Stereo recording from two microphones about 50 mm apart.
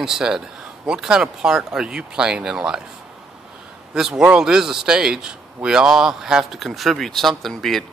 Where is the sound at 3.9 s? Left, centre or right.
Centre.